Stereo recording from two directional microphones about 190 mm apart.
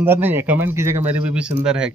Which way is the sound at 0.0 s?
10° right (ahead or behind).